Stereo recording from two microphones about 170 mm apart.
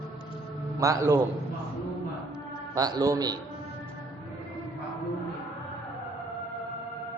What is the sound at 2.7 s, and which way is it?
Speech, 20° right (ahead or behind).